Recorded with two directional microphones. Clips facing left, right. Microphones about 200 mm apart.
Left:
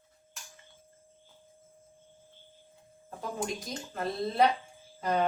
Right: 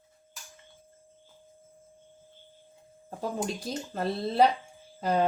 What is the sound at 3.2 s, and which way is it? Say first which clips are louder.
Speech: right 3 dB; 30° right (ahead or behind).